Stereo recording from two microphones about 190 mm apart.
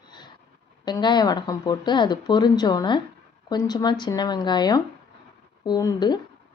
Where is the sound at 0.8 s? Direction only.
20° left (ahead or behind).